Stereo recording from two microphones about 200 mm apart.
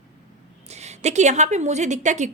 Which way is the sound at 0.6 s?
35° right (ahead or behind).